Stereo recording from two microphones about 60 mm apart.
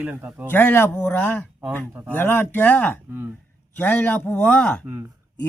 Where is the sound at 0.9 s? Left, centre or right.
Left.